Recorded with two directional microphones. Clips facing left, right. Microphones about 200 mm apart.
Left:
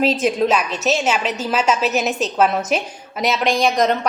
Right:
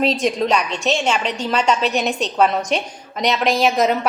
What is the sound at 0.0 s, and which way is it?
A woman's voice, centre (ahead or behind).